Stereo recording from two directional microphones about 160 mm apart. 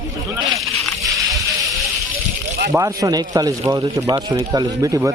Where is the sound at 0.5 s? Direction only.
Centre (ahead or behind).